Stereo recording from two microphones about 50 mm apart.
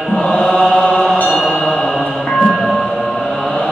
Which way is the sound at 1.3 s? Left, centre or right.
Left.